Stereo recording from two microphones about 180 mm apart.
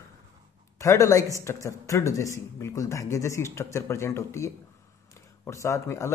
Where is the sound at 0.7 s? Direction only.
15° left (ahead or behind).